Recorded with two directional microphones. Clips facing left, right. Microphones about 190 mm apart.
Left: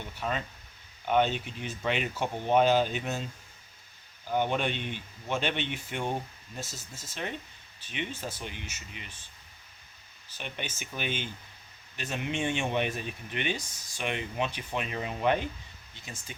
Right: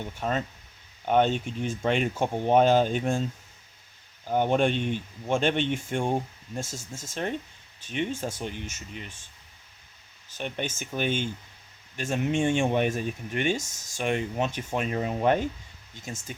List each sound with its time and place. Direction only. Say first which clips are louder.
0.0 s speech: right 4 dB; 45° right (ahead or behind)
4.3 s speech: right 5 dB; 45° right (ahead or behind)
10.3 s speech: right 7 dB; 45° right (ahead or behind)